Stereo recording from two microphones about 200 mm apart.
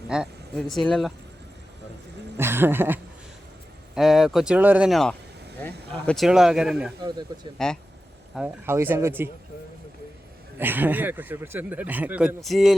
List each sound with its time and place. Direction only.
0.1 s speech: centre (ahead or behind)
2.4 s speech: 10° right (ahead or behind)
7.3 s speech: 20° right (ahead or behind)
8.4 s speech: 10° right (ahead or behind)
10.6 s speech: 10° right (ahead or behind)